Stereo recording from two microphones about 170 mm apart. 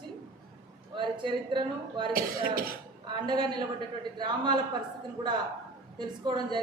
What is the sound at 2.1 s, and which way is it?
Speech, 60° right (ahead or behind).